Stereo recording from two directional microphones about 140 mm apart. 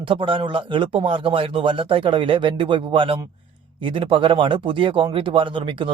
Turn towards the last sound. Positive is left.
turn(degrees=-35)  # may be behind; listen again after turning